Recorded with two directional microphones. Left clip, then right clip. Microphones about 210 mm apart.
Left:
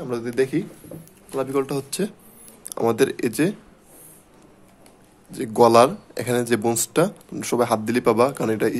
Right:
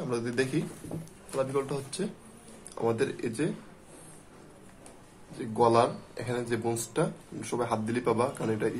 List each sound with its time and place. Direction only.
0.0 s a man's voice: 30° left (ahead or behind)
1.3 s speech: 45° left (ahead or behind)
5.4 s speech: 50° left (ahead or behind)